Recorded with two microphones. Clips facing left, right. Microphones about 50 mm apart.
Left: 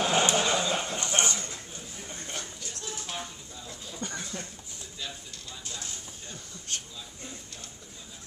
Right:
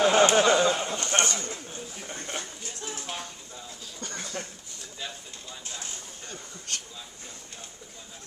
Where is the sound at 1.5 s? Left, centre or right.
Right.